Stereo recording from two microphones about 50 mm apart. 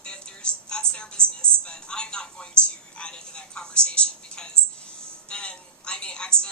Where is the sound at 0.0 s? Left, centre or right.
Centre.